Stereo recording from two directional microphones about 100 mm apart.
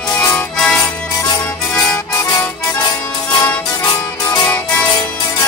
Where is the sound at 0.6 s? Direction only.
10° left (ahead or behind).